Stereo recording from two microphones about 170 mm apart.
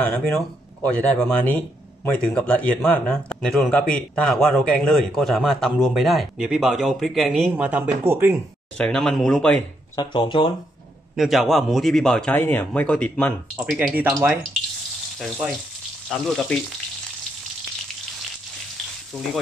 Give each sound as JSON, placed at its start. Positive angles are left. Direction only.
{"t": 0.0, "sound": "a man's voice", "side_deg": 10}
{"t": 8.7, "sound": "a man's voice", "side_deg": 5}
{"t": 9.9, "sound": "speech", "side_deg": 25}
{"t": 11.1, "sound": "a man's voice", "side_deg": 0}
{"t": 13.7, "sound": "speech", "side_deg": -5}
{"t": 16.1, "sound": "a man's voice", "side_deg": 0}